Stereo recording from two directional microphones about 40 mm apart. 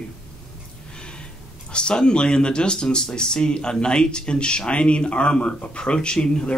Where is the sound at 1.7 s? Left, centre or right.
Left.